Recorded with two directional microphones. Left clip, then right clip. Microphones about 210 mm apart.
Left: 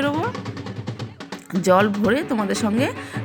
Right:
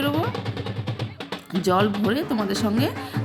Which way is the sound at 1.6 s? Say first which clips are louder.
Left 4 dB; 15° left (ahead or behind).